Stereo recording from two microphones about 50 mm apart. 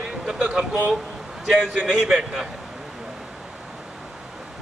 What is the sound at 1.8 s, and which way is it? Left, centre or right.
Speech, centre.